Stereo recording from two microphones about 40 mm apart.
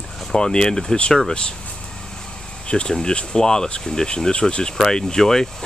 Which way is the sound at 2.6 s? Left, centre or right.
Left.